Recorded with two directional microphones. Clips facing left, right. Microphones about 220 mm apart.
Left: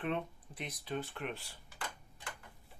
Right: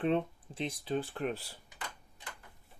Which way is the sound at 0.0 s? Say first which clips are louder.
Right 7 dB; 30° right (ahead or behind).